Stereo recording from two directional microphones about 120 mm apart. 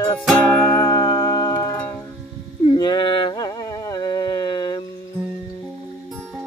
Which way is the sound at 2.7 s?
40° left (ahead or behind).